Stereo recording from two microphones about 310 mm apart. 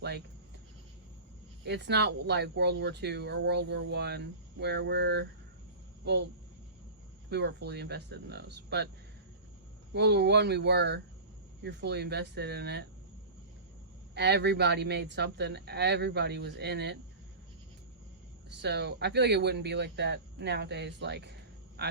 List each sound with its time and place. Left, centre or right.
1.6 s speech: right
7.3 s speech: right
9.9 s speech: right
14.2 s speech: right
18.6 s speech: right